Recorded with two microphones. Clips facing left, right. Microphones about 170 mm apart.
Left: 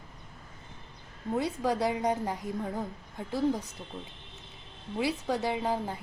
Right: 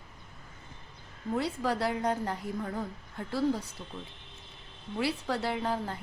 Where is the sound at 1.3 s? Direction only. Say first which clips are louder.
Left 1 dB; 15° left (ahead or behind).